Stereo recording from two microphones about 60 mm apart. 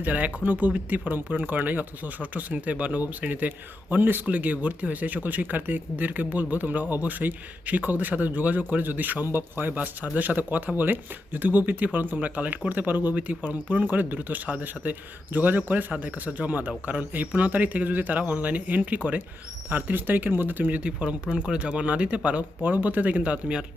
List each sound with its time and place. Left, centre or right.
0.0 s speech: right